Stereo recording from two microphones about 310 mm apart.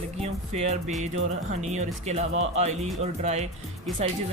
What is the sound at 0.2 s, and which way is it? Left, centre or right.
Speech, right.